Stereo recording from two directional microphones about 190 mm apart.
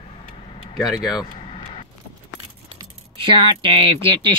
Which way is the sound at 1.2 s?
20° left (ahead or behind).